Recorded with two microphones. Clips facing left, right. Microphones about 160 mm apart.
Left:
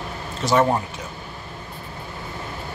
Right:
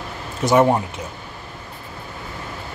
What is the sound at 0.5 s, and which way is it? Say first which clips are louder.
Speech: right 3 dB; 20° right (ahead or behind).